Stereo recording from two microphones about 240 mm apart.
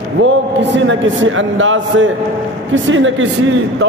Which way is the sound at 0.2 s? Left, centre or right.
Right.